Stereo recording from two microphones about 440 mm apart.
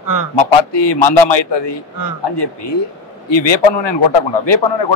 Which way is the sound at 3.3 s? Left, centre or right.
Left.